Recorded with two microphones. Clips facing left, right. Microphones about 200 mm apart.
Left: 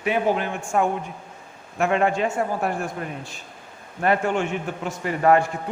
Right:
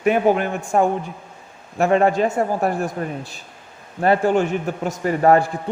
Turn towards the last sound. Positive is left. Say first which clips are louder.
# right 3 dB
turn(degrees=-35)  # may be behind; listen again after turning